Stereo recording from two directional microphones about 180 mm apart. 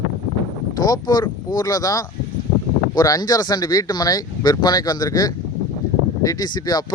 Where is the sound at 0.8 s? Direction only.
20° left (ahead or behind).